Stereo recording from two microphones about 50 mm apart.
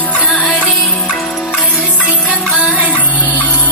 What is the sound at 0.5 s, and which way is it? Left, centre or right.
Music, left.